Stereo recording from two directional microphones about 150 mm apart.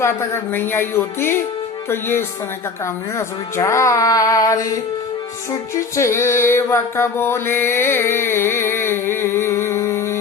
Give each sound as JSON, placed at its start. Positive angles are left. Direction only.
{"t": 0.0, "sound": "speech", "side_deg": 15}
{"t": 6.0, "sound": "music", "side_deg": 20}